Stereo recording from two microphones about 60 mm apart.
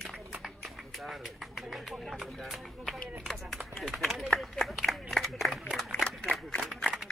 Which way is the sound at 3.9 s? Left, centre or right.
Centre.